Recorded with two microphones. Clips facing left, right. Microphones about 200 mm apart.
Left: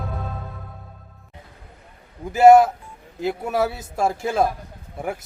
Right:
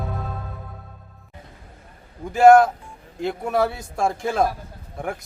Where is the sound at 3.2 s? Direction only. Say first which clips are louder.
Even; 5° left (ahead or behind).